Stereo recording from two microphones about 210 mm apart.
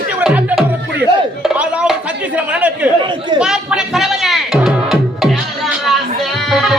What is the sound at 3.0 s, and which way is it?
Chatter, 20° right (ahead or behind).